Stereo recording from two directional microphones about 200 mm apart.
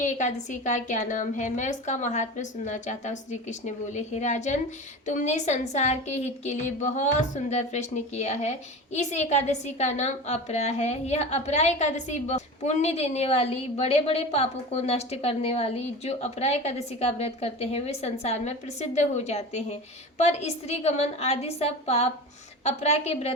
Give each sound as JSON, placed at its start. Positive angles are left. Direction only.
{"t": 0.0, "sound": "a woman's voice", "side_deg": 35}